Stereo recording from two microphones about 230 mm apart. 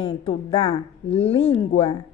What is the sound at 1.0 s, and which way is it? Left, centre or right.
Speech, left.